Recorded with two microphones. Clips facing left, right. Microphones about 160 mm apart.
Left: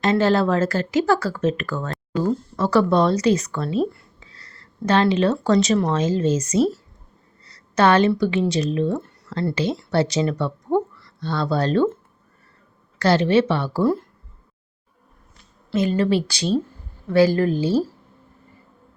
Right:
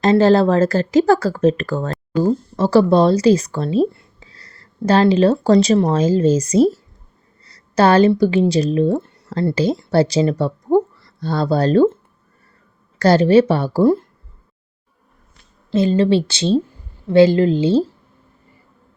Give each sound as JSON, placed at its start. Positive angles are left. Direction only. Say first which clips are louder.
{"t": 0.0, "sound": "a woman's voice", "louder": "right 6 dB", "side_deg": -35}
{"t": 13.0, "sound": "speech", "louder": "right 5 dB", "side_deg": -40}
{"t": 15.7, "sound": "speech", "louder": "right 5 dB", "side_deg": -30}